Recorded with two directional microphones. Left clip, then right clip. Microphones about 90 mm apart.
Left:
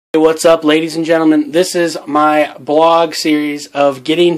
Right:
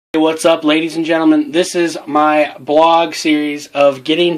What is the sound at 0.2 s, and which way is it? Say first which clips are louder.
Speech: left 3 dB; 40° left (ahead or behind).